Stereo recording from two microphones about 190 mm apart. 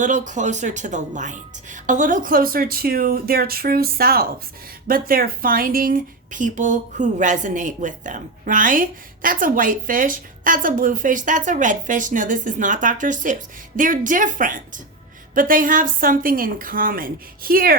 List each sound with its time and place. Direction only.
0.0 s speech: 40° right (ahead or behind)